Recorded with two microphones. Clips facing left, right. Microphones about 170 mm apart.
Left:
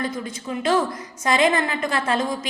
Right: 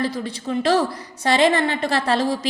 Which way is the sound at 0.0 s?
35° right (ahead or behind).